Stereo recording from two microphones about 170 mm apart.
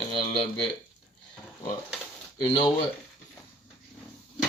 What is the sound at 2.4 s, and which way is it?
Speech, 25° left (ahead or behind).